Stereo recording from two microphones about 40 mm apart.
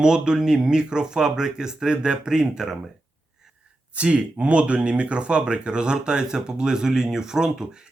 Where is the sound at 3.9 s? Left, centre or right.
Right.